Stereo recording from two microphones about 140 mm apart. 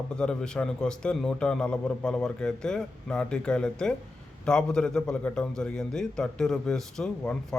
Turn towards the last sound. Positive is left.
turn(degrees=5)  # may be behind; listen again after turning